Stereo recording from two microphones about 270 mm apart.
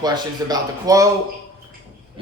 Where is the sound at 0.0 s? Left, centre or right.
Centre.